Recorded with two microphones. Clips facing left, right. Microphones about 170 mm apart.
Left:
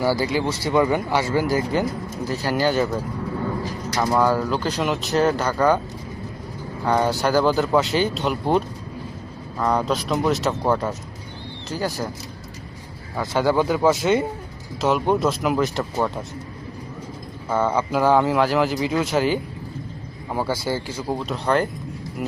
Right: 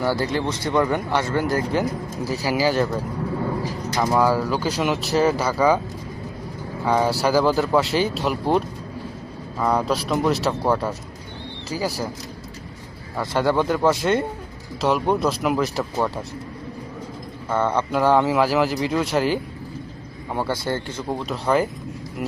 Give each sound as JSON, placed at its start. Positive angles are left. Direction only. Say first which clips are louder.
{"t": 0.0, "sound": "speech", "louder": "left 1 dB", "side_deg": 5}
{"t": 6.8, "sound": "speech", "louder": "even", "side_deg": 0}
{"t": 13.1, "sound": "speech", "louder": "left 1 dB", "side_deg": 0}
{"t": 17.5, "sound": "speech", "louder": "even", "side_deg": 5}